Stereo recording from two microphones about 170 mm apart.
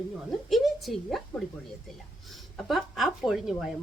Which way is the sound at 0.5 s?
Centre (ahead or behind).